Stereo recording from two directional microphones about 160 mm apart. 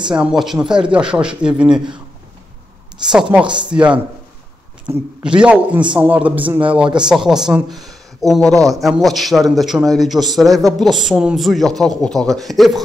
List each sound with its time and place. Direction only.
0.2 s speech: centre (ahead or behind)
3.1 s a man's voice: 5° right (ahead or behind)
8.5 s a man's voice: 20° right (ahead or behind)
8.8 s speech: centre (ahead or behind)